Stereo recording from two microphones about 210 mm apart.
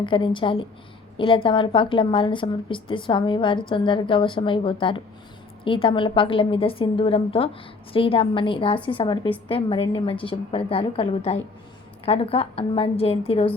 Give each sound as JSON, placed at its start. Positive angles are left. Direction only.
{"t": 0.0, "sound": "a woman's voice", "side_deg": 25}